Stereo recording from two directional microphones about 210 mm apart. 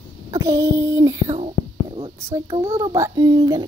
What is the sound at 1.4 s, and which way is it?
Whispering, 25° right (ahead or behind).